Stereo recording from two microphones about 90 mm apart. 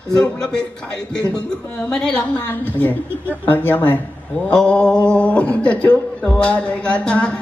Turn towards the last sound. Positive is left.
turn(degrees=15)  # may be behind; listen again after turning